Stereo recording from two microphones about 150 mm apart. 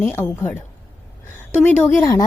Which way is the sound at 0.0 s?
15° left (ahead or behind).